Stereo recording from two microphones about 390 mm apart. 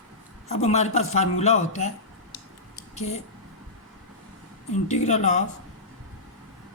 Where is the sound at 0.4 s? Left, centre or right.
Centre.